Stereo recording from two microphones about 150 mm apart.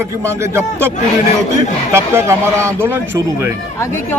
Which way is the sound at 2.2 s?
15° right (ahead or behind).